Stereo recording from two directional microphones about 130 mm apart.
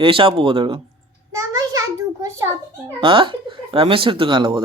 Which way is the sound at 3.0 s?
40° right (ahead or behind).